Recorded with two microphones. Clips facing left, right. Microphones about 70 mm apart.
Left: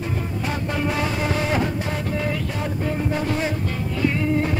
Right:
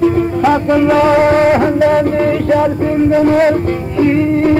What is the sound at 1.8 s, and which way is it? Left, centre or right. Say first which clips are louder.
Music: right 15 dB; right.